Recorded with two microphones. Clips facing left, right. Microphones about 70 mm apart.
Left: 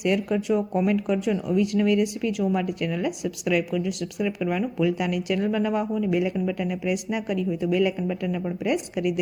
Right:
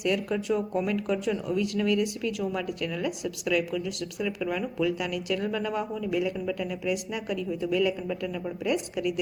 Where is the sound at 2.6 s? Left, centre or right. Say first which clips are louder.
Left 4 dB; left.